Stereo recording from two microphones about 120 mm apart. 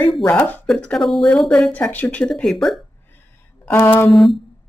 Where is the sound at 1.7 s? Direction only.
15° left (ahead or behind).